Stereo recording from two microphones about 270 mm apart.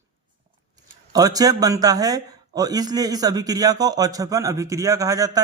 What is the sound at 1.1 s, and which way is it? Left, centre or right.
A man's voice, centre.